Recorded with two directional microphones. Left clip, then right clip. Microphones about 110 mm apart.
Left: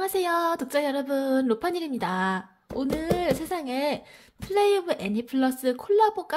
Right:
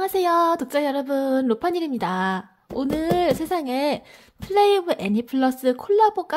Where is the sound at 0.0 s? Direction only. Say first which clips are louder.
Right 5 dB; 35° right (ahead or behind).